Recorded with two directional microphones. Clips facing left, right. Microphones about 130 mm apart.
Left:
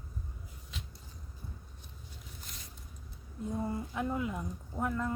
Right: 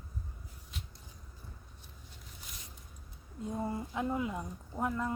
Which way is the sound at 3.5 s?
20° right (ahead or behind).